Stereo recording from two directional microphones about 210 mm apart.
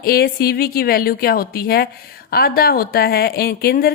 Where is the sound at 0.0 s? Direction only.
45° left (ahead or behind).